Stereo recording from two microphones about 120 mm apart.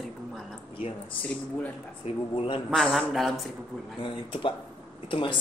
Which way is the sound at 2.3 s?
50° left (ahead or behind).